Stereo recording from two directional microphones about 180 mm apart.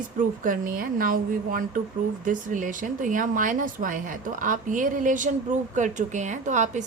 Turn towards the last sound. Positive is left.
turn(degrees=-40)  # may be behind; listen again after turning